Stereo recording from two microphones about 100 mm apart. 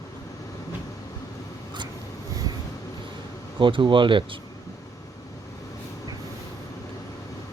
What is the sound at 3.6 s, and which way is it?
Speech, 55° right (ahead or behind).